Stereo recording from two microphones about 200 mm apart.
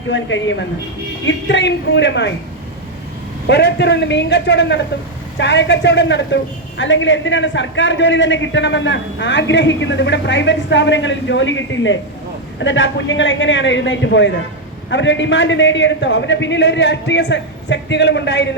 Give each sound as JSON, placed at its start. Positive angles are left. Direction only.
{"t": 0.1, "sound": "a woman's voice", "side_deg": 70}
{"t": 3.4, "sound": "a man's voice", "side_deg": 60}